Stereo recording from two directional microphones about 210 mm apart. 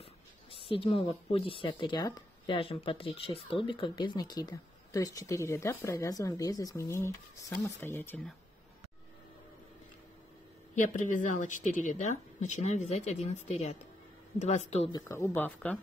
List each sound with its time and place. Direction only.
0.0 s speech: 25° left (ahead or behind); by 8.4 s 10° left (ahead or behind)
10.7 s speech: 40° left (ahead or behind); by 15.8 s 10° left (ahead or behind)